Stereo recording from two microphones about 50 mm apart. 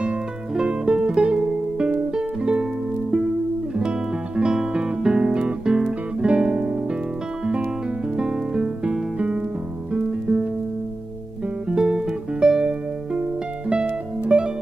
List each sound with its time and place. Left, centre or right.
0.6 s music: right
4.4 s guitar: centre
8.2 s music: centre
11.7 s music: centre
14.2 s music: centre